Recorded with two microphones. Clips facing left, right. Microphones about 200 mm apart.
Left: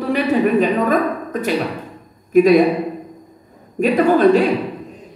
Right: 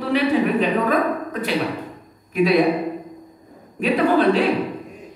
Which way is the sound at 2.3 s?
45° left (ahead or behind).